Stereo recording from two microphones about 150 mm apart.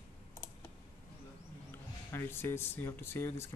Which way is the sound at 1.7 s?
15° left (ahead or behind).